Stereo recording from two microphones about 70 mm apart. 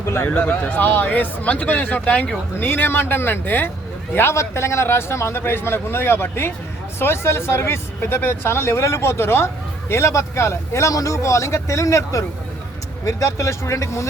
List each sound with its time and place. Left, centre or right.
0.0 s a sound: left
0.3 s a man's voice: left
2.6 s speech: left